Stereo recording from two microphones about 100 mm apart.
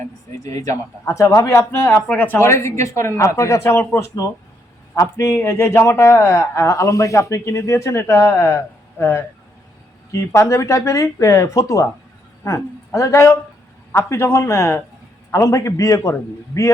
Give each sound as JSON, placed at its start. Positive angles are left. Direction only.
{"t": 0.4, "sound": "a man's voice", "side_deg": 35}
{"t": 1.9, "sound": "a man's voice", "side_deg": 15}